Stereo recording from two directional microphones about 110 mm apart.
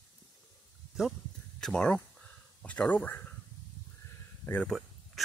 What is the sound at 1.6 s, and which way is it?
Speech, 5° left (ahead or behind).